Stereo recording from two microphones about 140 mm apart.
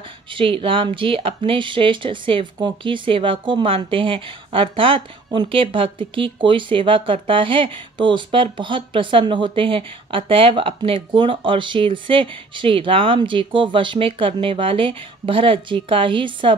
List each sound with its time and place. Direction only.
0.3 s speech: 40° right (ahead or behind)